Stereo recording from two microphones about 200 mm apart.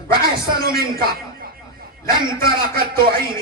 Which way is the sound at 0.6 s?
50° right (ahead or behind).